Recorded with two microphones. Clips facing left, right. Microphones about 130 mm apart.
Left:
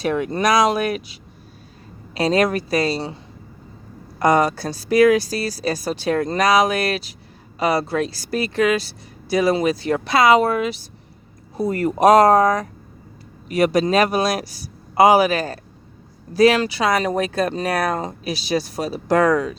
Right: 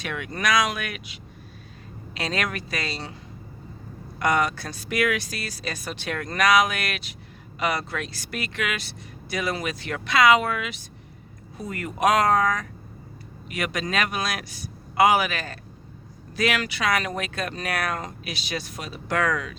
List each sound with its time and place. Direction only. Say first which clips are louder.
0.0 s speech: left 9 dB; 35° left (ahead or behind)
4.2 s speech: left 7 dB; 35° left (ahead or behind)